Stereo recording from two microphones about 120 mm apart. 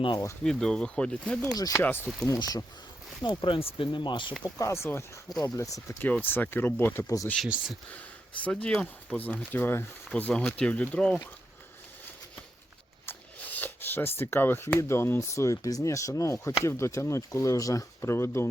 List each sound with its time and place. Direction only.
0.4 s speech: 5° left (ahead or behind)
1.5 s speech: 30° left (ahead or behind)
1.8 s speech: 15° left (ahead or behind)
2.2 s speech: 30° left (ahead or behind)
3.2 s speech: 45° left (ahead or behind)
4.4 s speech: 30° left (ahead or behind)
6.0 s speech: 15° left (ahead or behind)
7.3 s speech: 5° right (ahead or behind)
8.6 s speech: 10° left (ahead or behind)
13.1 s speech: 15° left (ahead or behind)